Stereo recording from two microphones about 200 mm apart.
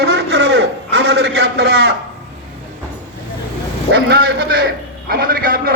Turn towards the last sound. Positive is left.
turn(degrees=-50)  # may be behind; listen again after turning